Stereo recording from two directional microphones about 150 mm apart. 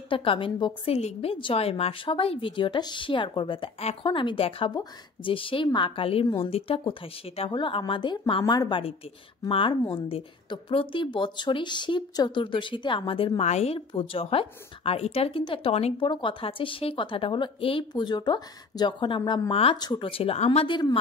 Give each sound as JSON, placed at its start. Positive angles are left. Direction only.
{"t": 0.1, "sound": "a woman's voice", "side_deg": 35}